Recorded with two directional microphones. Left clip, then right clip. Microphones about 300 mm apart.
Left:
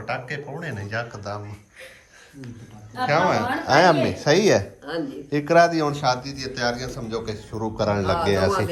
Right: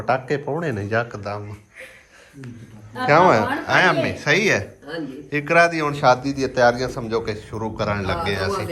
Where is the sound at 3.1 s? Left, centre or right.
Centre.